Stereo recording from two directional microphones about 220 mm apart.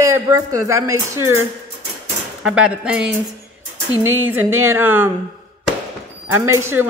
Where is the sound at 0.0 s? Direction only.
15° right (ahead or behind).